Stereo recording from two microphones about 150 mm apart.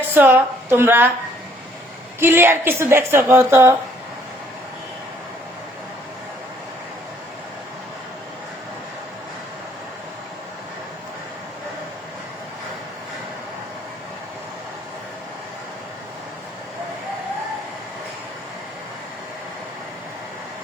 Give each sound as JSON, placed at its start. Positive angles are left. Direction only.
{"t": 0.1, "sound": "a woman's voice", "side_deg": -15}
{"t": 2.2, "sound": "a woman's voice", "side_deg": -15}